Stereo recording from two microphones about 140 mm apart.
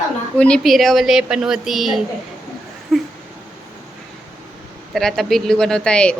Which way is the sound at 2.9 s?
Centre (ahead or behind).